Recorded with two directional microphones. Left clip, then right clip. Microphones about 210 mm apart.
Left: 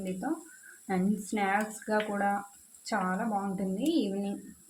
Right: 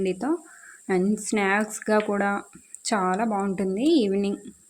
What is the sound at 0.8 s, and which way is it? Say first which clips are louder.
Speech: right 8 dB; 45° right (ahead or behind).